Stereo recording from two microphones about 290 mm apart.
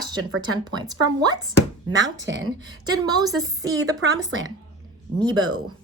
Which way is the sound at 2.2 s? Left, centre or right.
Right.